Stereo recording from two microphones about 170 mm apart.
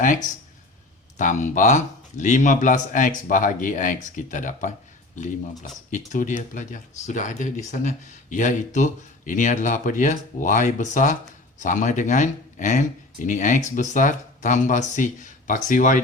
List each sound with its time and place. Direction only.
1.1 s speech: 45° left (ahead or behind)
6.1 s speech: 50° left (ahead or behind)